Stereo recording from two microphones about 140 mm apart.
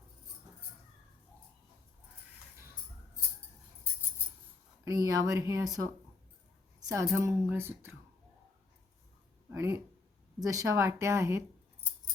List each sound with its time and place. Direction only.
4.9 s speech: 25° right (ahead or behind)
9.5 s speech: 20° right (ahead or behind)